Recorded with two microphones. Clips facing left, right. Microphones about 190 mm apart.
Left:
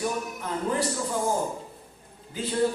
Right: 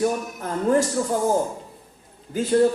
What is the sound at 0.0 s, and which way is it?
Speech, 50° right (ahead or behind).